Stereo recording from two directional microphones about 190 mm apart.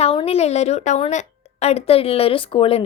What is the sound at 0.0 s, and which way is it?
A woman's voice, 30° left (ahead or behind).